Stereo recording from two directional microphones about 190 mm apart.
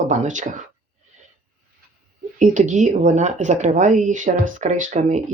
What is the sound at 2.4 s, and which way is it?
Speech, 40° right (ahead or behind).